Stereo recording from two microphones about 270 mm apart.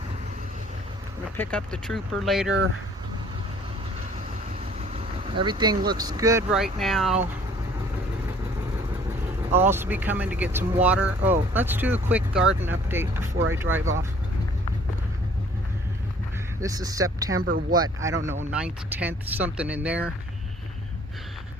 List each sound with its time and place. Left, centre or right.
1.4 s speech: centre
5.4 s speech: centre
9.6 s speech: centre
16.6 s speech: centre
17.4 s speech: right
18.5 s speech: centre